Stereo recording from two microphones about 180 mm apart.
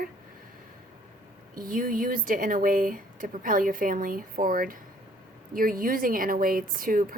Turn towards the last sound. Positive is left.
turn(degrees=-50)  # may be behind; listen again after turning